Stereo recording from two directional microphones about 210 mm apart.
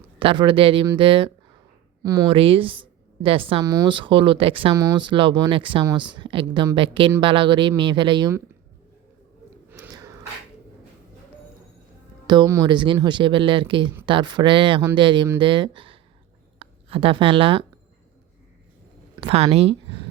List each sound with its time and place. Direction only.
0.2 s a woman's voice: 25° right (ahead or behind)
4.7 s a woman's voice: 15° right (ahead or behind)
9.6 s a sound: 10° right (ahead or behind)
12.3 s a woman's voice: 15° right (ahead or behind)
19.2 s speech: 30° right (ahead or behind)